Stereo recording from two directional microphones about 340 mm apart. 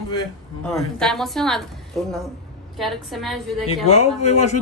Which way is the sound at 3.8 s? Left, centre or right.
Centre.